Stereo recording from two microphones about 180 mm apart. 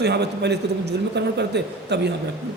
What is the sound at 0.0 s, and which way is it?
A man's voice, 65° right (ahead or behind).